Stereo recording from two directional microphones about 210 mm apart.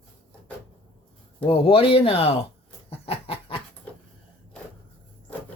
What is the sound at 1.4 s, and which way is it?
Speech, 25° left (ahead or behind).